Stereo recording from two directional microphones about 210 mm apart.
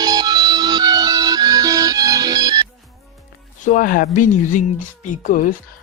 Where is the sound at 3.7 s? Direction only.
40° left (ahead or behind).